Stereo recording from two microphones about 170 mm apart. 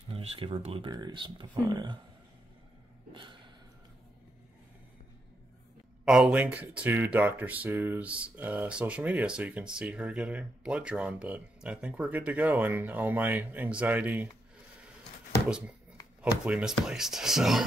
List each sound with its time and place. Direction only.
0.1 s speech: 35° right (ahead or behind)
3.1 s a sound: 30° right (ahead or behind)
6.0 s speech: 5° right (ahead or behind)
15.4 s speech: 5° right (ahead or behind)